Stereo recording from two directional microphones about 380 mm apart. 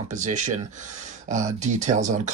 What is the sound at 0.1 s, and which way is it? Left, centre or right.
Speech, centre.